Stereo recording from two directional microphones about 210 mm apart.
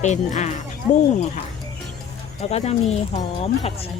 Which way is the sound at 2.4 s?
30° left (ahead or behind).